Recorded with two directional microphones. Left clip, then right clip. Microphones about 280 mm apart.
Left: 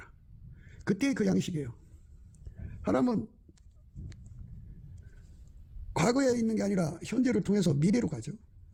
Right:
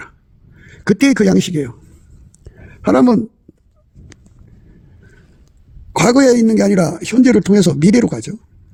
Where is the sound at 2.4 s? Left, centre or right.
Right.